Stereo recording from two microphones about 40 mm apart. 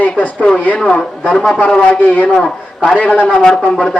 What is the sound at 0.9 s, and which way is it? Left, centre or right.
Speech, left.